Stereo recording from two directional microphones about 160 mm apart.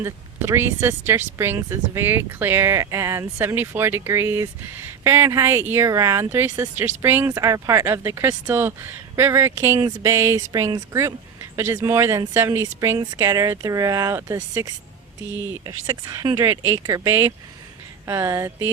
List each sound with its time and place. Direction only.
0.0 s speech: 15° right (ahead or behind)